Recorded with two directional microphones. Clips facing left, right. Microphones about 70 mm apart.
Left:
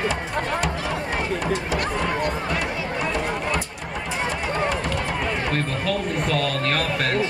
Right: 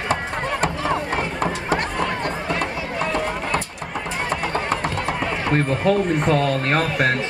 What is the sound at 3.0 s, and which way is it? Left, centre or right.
Run, centre.